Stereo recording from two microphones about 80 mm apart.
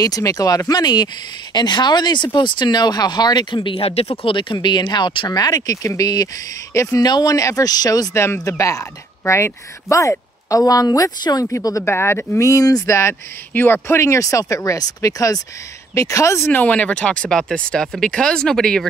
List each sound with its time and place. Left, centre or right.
0.0 s speech: left
5.3 s speech: left
6.7 s speech: left
7.0 s speech: left
7.3 s speech: left
8.1 s speech: left
11.8 s speech: left
12.4 s speech: left
13.5 s speech: left
16.5 s speech: centre